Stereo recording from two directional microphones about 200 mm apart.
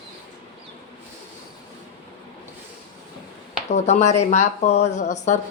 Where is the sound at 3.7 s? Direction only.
35° left (ahead or behind).